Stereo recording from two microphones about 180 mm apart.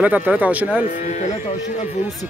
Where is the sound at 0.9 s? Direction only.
40° left (ahead or behind).